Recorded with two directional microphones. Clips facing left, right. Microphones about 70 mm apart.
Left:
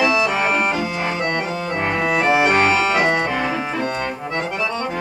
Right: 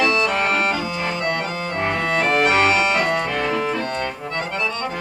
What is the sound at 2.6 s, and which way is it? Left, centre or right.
Music, left.